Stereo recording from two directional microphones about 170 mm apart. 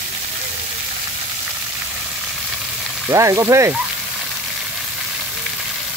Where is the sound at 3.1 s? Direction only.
20° right (ahead or behind).